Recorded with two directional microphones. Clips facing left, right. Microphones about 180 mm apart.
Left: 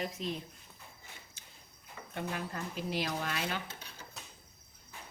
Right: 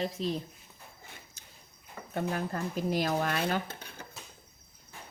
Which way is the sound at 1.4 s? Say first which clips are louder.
Right 2 dB; 40° right (ahead or behind).